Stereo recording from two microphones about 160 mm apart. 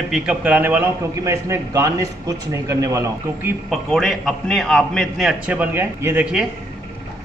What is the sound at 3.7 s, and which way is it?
A man's voice, centre (ahead or behind).